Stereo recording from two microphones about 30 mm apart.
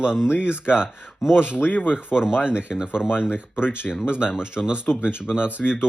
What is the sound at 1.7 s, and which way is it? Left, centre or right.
Speech, left.